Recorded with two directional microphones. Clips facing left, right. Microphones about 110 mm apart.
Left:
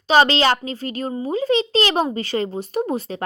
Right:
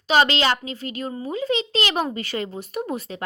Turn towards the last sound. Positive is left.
turn(degrees=30)  # may be behind; listen again after turning